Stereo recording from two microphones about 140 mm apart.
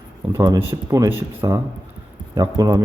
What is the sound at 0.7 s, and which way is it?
A man's voice, 25° right (ahead or behind).